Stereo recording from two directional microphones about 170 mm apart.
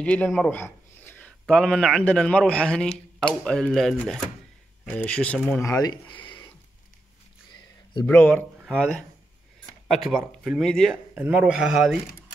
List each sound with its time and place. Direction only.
0.0 s speech: 10° left (ahead or behind)
5.7 s speech: 25° left (ahead or behind)
8.1 s speech: 10° left (ahead or behind)
11.1 s speech: 10° right (ahead or behind)